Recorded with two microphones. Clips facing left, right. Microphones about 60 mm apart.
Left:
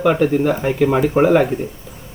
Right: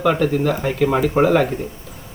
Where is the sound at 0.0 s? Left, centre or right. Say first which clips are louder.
Left 2 dB; centre.